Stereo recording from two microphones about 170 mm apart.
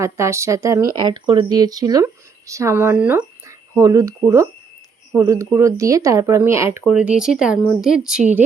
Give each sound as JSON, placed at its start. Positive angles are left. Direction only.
{"t": 0.0, "sound": "speech", "side_deg": -15}